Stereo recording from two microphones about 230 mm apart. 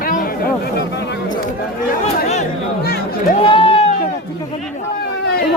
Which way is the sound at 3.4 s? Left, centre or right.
Left.